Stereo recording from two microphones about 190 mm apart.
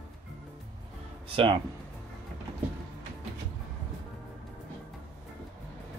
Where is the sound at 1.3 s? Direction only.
25° right (ahead or behind).